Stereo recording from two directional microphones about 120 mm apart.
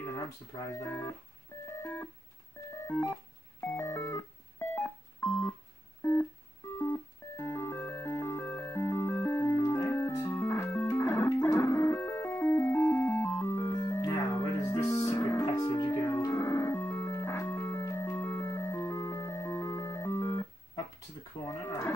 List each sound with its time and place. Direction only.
0.7 s speech: 20° left (ahead or behind)
1.7 s a sound: 20° left (ahead or behind)
2.9 s speech: 30° left (ahead or behind)
3.6 s keyboard: 20° left (ahead or behind)
6.8 s music: 25° left (ahead or behind)
21.5 s a sound: 20° left (ahead or behind)